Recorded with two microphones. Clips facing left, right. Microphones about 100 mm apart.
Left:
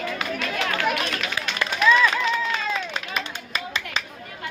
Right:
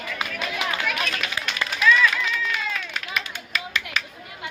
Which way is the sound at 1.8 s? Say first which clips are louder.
Left 1 dB; 25° left (ahead or behind).